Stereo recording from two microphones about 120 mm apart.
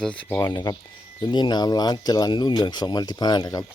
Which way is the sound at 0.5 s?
35° left (ahead or behind).